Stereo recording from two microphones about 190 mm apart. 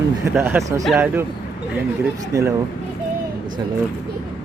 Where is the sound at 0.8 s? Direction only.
5° right (ahead or behind).